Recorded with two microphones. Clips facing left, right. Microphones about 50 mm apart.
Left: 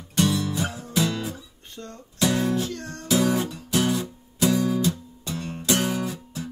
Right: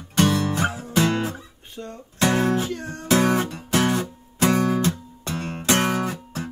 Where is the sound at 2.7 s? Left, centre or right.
Centre.